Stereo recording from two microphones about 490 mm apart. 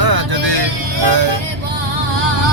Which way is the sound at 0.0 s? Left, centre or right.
Right.